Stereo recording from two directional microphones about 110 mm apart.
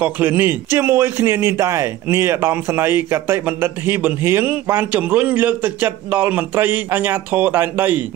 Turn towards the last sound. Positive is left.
turn(degrees=-15)  # may be behind; listen again after turning